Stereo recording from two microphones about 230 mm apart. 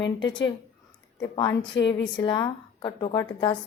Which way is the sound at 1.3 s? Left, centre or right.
Left.